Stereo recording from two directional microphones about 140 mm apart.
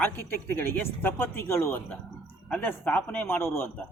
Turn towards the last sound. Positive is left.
turn(degrees=15)  # may be behind; listen again after turning